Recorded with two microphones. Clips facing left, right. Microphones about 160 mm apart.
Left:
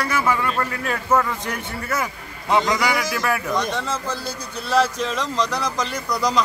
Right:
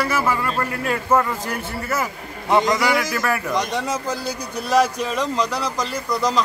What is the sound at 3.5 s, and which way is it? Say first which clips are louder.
A man's voice: right 1 dB; 15° right (ahead or behind).